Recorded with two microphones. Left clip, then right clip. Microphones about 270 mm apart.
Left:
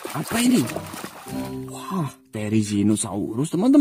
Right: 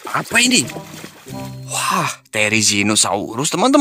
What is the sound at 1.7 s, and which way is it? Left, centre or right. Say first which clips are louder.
Speech: right 18 dB; right.